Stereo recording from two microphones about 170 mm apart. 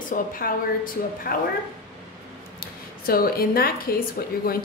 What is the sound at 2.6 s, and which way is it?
A woman's voice, 60° left (ahead or behind).